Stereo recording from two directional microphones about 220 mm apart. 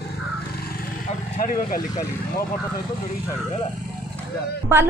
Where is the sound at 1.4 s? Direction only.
40° left (ahead or behind).